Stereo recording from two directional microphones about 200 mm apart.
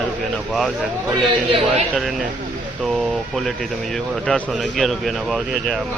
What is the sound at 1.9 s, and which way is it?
Speech, centre (ahead or behind).